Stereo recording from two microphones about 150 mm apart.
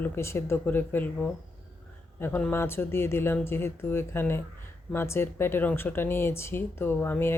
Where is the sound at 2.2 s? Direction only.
15° left (ahead or behind).